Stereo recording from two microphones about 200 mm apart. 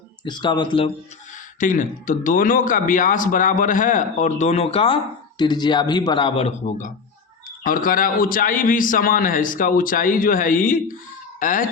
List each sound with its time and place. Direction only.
0.3 s speech: 20° left (ahead or behind)
1.5 s a man's voice: 40° left (ahead or behind)